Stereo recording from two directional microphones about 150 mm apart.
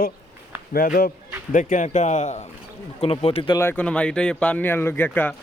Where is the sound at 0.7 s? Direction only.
75° left (ahead or behind).